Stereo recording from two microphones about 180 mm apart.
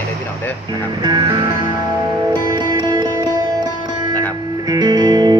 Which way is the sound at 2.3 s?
25° right (ahead or behind).